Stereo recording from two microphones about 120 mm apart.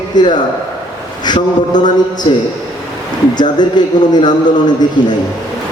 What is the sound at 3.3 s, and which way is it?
A man's voice, 40° left (ahead or behind).